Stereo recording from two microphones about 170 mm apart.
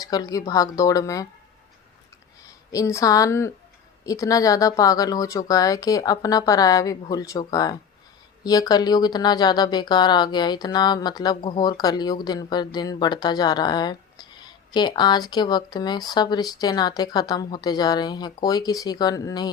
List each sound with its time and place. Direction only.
0.0 s speech: 20° left (ahead or behind)
2.7 s speech: 20° left (ahead or behind)